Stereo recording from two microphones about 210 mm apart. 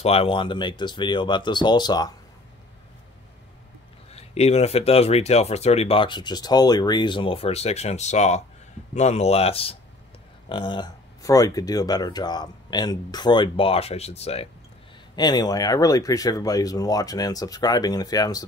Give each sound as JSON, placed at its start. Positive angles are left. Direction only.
{"t": 0.0, "sound": "speech", "side_deg": 25}
{"t": 4.1, "sound": "speech", "side_deg": 30}
{"t": 15.1, "sound": "speech", "side_deg": 20}